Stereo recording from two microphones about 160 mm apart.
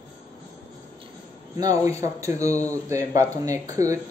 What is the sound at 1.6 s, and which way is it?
Speech, 20° right (ahead or behind).